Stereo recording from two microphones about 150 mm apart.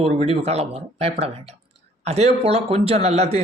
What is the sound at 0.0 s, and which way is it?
A man's voice, 40° right (ahead or behind).